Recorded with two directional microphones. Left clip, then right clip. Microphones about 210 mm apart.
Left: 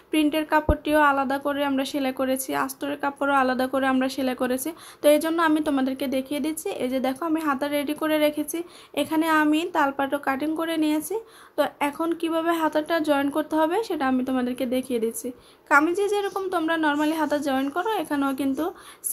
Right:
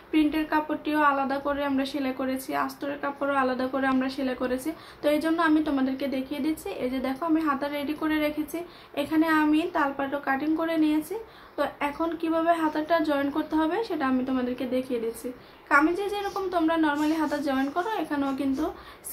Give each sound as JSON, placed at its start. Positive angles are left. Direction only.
{"t": 0.1, "sound": "a woman's voice", "side_deg": 40}